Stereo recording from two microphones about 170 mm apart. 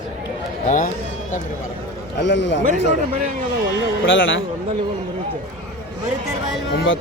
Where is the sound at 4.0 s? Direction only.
90° left.